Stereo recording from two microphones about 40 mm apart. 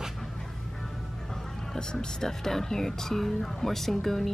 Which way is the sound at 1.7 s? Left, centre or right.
Centre.